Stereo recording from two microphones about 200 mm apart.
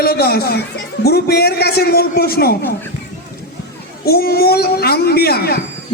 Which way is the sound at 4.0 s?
50° left (ahead or behind).